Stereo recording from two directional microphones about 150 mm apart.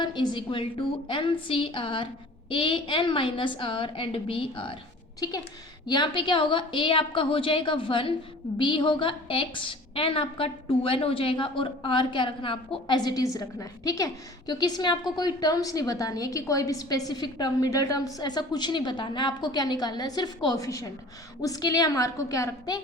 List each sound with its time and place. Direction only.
0.0 s a woman's voice: 30° left (ahead or behind)
5.2 s a woman's voice: 25° left (ahead or behind)